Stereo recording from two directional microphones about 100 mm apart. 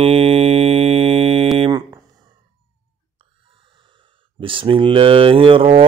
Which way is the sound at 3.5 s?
60° right (ahead or behind).